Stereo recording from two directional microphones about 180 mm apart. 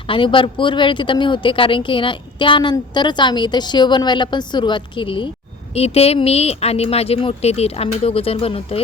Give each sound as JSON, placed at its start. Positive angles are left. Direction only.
{"t": 0.1, "sound": "speech", "side_deg": 30}